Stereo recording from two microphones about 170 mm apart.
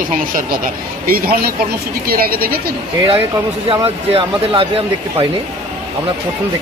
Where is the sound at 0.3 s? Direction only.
55° right (ahead or behind).